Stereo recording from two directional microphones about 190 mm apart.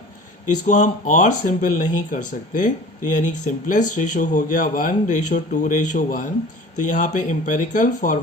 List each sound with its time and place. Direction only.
0.4 s speech: 40° left (ahead or behind)